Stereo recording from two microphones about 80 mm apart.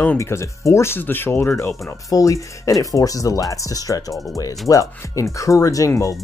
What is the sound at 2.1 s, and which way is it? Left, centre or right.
Speech, left.